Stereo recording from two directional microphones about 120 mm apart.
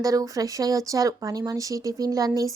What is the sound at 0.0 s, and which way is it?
A woman's voice, 30° right (ahead or behind).